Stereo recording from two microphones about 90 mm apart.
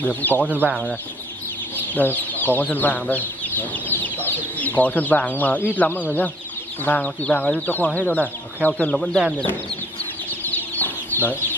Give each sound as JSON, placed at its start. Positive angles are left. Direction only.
{"t": 0.0, "sound": "speech", "side_deg": 20}
{"t": 0.5, "sound": "speech", "side_deg": -15}
{"t": 2.0, "sound": "speech", "side_deg": 20}
{"t": 10.5, "sound": "chicken", "side_deg": 20}